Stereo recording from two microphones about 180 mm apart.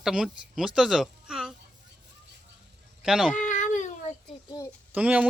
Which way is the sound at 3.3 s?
45° left (ahead or behind).